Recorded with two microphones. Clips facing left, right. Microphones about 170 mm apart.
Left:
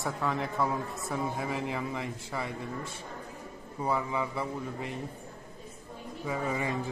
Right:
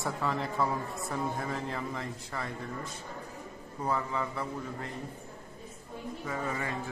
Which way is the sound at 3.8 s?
10° left (ahead or behind).